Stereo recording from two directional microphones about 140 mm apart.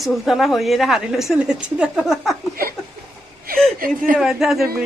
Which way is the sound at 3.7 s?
85° right.